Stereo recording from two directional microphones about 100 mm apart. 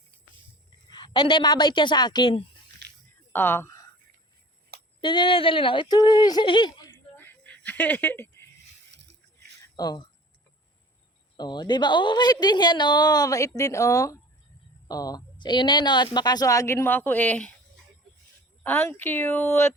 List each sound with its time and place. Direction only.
0.9 s a woman's voice: 45° left (ahead or behind)
3.3 s a woman's voice: 20° left (ahead or behind)
4.9 s speech: 55° left (ahead or behind)
6.4 s speech: 55° left (ahead or behind)
6.9 s a sound: 20° left (ahead or behind)
9.7 s a woman's voice: 45° left (ahead or behind)
11.3 s a woman's voice: 45° left (ahead or behind); by 17.5 s 15° left (ahead or behind)
18.6 s a woman's voice: 20° left (ahead or behind)